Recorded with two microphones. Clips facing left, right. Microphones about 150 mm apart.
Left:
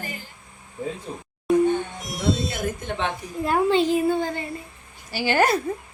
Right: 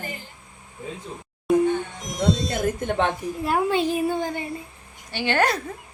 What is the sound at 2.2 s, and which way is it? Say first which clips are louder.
Speech: right 2 dB; 45° right (ahead or behind).